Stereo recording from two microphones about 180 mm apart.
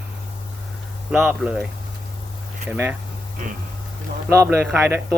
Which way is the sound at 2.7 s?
10° right (ahead or behind).